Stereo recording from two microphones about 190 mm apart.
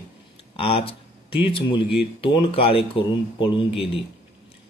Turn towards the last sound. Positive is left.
turn(degrees=30)  # may be behind; listen again after turning